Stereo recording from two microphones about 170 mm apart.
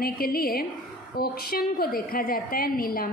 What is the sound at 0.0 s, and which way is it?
A woman's voice, 60° left (ahead or behind).